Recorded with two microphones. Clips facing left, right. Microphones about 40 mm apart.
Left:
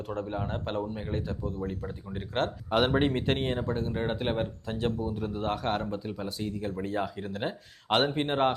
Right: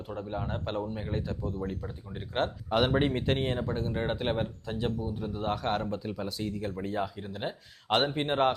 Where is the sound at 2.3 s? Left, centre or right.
Left.